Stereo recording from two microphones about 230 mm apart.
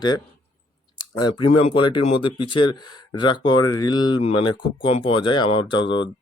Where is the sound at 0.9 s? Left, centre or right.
Centre.